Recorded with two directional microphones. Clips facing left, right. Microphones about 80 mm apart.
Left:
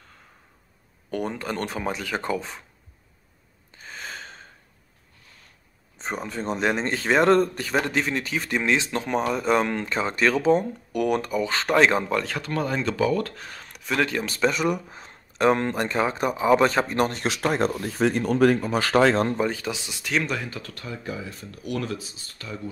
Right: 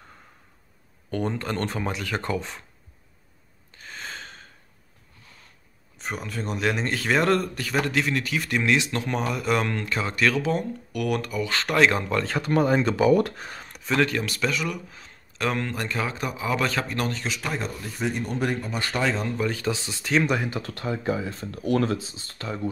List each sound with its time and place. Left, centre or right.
1.1 s speech: centre
3.7 s a sound: centre
5.9 s speech: left
12.2 s speech: centre
12.4 s speech: centre
13.7 s a sound: centre
14.0 s speech: centre
14.5 s speech: left
17.3 s speech: left
18.9 s speech: left
19.5 s speech: centre
20.2 s speech: centre